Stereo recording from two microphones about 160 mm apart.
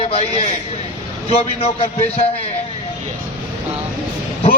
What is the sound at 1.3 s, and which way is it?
A man's voice, 40° left (ahead or behind).